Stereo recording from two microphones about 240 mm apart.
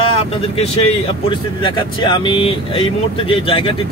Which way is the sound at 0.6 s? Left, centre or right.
Left.